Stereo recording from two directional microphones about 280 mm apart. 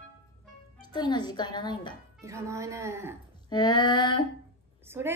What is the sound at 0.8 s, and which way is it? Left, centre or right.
A woman's voice, centre.